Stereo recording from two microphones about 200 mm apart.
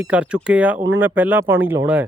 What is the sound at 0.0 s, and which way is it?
Speech, 5° right (ahead or behind).